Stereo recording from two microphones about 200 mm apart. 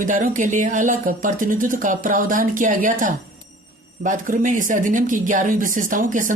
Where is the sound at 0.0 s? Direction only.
40° right (ahead or behind).